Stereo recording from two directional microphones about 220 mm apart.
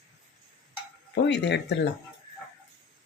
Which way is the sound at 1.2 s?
50° left (ahead or behind).